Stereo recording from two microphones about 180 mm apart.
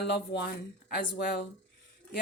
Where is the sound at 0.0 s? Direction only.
65° left (ahead or behind).